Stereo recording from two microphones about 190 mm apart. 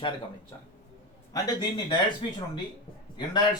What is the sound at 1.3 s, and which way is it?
Speech, 20° left (ahead or behind).